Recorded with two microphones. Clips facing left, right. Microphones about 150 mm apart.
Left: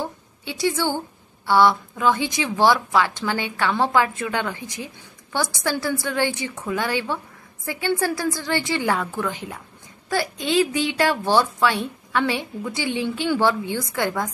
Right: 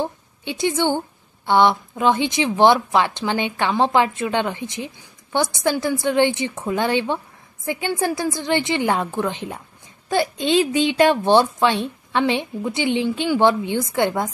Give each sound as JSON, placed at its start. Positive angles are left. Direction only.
{"t": 0.0, "sound": "a woman's voice", "side_deg": -20}